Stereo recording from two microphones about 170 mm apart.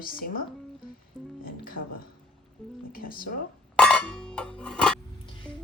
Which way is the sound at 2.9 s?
55° left (ahead or behind).